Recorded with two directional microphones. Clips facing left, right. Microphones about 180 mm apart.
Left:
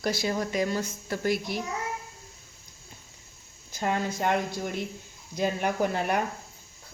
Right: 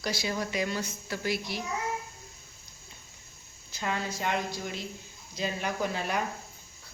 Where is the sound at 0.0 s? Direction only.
50° left (ahead or behind).